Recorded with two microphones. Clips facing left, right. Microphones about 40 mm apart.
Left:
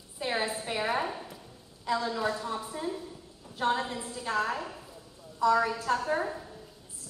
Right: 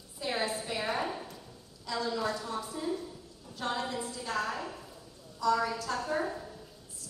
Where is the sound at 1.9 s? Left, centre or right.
Left.